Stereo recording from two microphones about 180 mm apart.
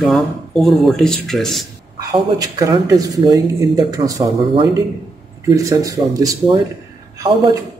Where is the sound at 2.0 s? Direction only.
20° right (ahead or behind).